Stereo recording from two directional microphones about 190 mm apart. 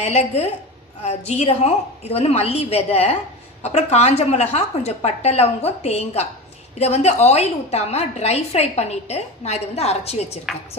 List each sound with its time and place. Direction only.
0.0 s a woman's voice: 35° left (ahead or behind)